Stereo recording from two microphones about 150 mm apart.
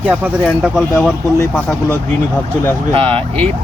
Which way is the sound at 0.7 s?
Centre (ahead or behind).